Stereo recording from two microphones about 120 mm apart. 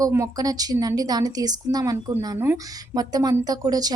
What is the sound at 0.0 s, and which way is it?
Speech, 25° right (ahead or behind).